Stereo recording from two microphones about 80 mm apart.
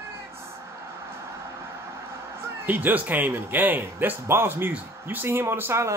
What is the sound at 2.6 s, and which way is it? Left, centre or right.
Speech, right.